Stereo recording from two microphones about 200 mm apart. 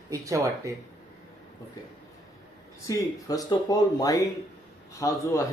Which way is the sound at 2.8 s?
15° left (ahead or behind).